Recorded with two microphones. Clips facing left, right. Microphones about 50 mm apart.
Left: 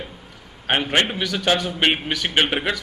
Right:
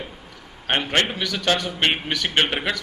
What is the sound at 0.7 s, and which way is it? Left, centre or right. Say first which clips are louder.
A man's voice: left 1 dB; centre.